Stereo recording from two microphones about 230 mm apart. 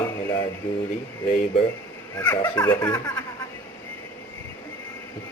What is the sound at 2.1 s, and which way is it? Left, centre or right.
Speech, centre.